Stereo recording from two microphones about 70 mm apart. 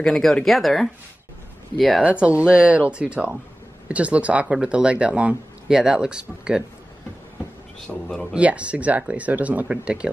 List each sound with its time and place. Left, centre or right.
0.0 s speech: centre
2.0 s speech: centre
7.8 s speech: centre
8.3 s speech: centre